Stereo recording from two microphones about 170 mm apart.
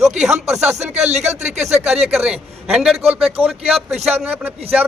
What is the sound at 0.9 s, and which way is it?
Speech, 40° right (ahead or behind).